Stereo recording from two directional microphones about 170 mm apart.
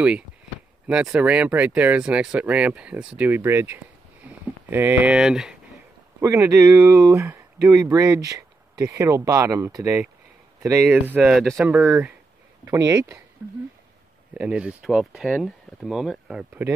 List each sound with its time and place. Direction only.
0.8 s speech: 5° right (ahead or behind)
6.2 s speech: 15° right (ahead or behind)
12.6 s speech: 20° right (ahead or behind)